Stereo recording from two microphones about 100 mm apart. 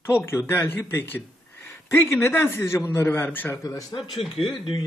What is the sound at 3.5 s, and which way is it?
Speech, 30° left (ahead or behind).